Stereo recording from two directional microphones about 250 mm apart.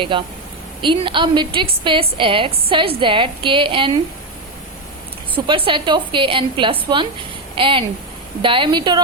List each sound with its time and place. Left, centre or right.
0.1 s a woman's voice: centre
5.3 s a woman's voice: right